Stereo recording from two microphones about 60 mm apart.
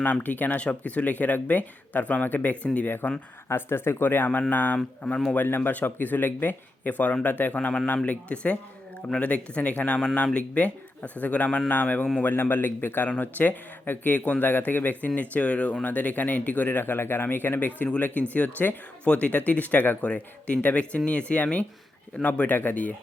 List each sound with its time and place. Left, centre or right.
0.0 s a man's voice: left
4.3 s a man's voice: left